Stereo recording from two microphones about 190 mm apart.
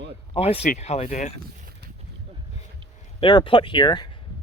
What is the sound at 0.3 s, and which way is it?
Speech, 30° left (ahead or behind).